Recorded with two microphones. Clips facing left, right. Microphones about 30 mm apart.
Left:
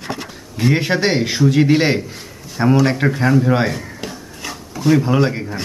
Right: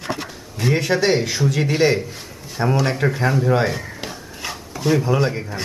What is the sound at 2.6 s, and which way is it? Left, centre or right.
Speech, left.